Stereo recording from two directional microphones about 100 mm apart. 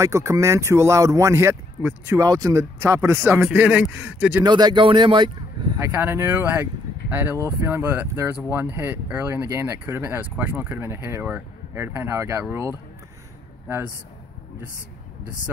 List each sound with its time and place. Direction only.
0.0 s speech: 30° right (ahead or behind)
1.8 s speech: 15° right (ahead or behind)
2.1 s speech: 40° right (ahead or behind)
3.3 s speech: 10° right (ahead or behind)
4.4 s speech: 45° right (ahead or behind)
5.8 s speech: 20° right (ahead or behind)